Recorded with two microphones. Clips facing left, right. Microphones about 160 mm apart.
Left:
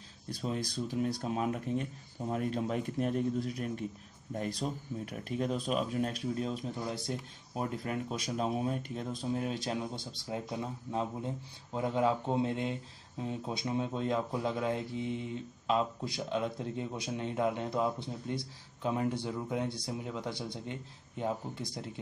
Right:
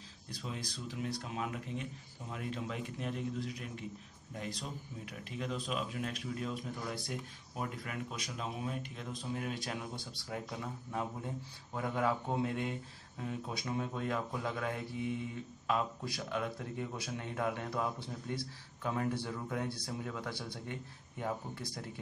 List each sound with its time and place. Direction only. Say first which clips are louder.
0.4 s speech: left 8 dB; 45° left (ahead or behind); by 21.9 s 20° left (ahead or behind)